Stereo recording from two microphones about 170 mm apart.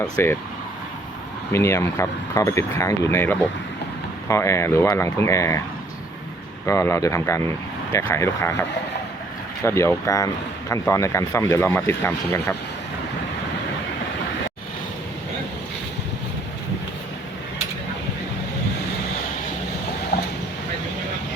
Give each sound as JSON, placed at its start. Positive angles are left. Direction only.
{"t": 0.0, "sound": "speech", "side_deg": 15}
{"t": 1.5, "sound": "speech", "side_deg": 15}
{"t": 6.7, "sound": "speech", "side_deg": 15}
{"t": 9.6, "sound": "speech", "side_deg": 15}